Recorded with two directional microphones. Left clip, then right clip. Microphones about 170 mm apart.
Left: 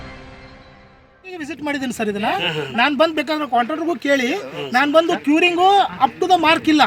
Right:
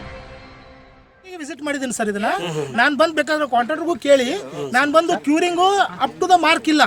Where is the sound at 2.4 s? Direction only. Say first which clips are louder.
Left 3 dB; 55° right (ahead or behind).